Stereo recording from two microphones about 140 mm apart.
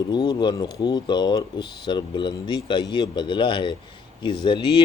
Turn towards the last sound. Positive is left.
turn(degrees=35)  # may be behind; listen again after turning